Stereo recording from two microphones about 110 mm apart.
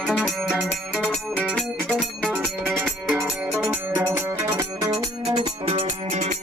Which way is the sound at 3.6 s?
15° right (ahead or behind).